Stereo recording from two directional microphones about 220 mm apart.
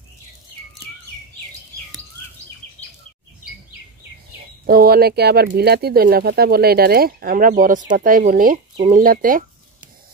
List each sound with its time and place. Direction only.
4.6 s speech: 45° right (ahead or behind)